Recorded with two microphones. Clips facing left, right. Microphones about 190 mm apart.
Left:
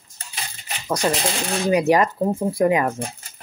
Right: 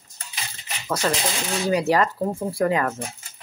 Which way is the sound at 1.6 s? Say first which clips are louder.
Left 3 dB; 15° left (ahead or behind).